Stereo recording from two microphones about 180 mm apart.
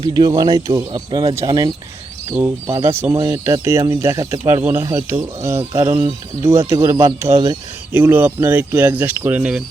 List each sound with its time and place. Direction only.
0.1 s speech: 20° right (ahead or behind)